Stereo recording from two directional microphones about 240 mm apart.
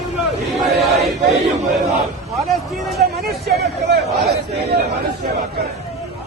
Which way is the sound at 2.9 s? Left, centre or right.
Right.